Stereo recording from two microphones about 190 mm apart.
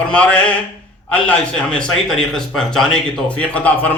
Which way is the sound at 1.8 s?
Centre (ahead or behind).